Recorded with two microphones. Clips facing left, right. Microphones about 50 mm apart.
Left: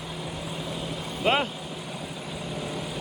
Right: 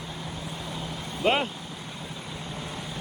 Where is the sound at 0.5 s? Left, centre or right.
Left.